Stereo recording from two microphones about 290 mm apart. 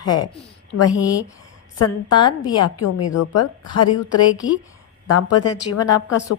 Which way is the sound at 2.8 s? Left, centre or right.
Left.